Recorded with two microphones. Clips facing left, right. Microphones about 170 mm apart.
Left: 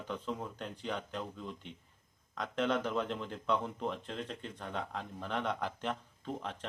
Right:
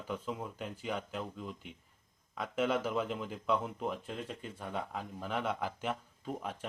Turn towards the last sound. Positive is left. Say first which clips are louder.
# right 1 dB
turn(degrees=-5)  # may be behind; listen again after turning